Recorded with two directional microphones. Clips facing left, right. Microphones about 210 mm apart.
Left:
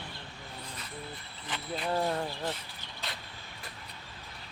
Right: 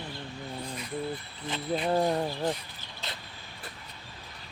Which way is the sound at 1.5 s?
20° right (ahead or behind).